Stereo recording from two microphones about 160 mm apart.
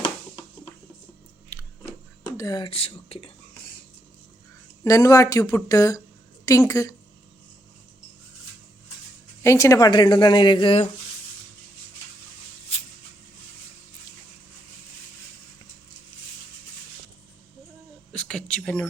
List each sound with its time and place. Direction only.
1.5 s biting: 15° left (ahead or behind)
2.2 s speech: 25° left (ahead or behind)
4.8 s a woman's voice: 20° left (ahead or behind)
9.4 s a woman's voice: 20° left (ahead or behind); by 10.8 s 35° left (ahead or behind)
18.1 s a sound: 5° left (ahead or behind)